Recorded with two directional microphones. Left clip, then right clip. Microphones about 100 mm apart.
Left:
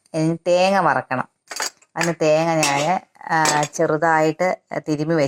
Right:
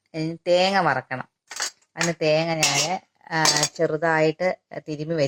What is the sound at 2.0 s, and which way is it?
Speech, 40° left (ahead or behind).